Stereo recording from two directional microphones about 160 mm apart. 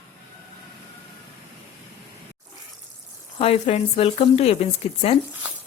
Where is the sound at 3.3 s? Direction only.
40° left (ahead or behind).